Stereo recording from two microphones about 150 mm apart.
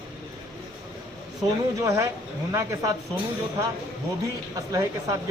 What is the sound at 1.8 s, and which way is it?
Speech, 20° right (ahead or behind).